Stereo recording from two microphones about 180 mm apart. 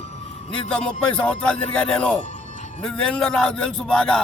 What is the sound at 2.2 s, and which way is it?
Music, 40° left (ahead or behind).